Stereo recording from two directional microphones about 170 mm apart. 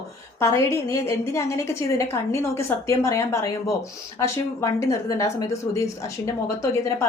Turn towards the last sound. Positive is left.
turn(degrees=15)  # may be behind; listen again after turning